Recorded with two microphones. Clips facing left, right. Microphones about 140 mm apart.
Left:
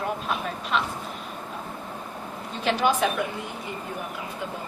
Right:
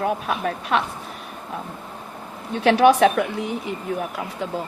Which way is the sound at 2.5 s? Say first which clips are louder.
Right 9 dB; 70° right (ahead or behind).